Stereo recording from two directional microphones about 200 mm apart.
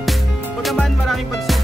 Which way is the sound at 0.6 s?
Centre (ahead or behind).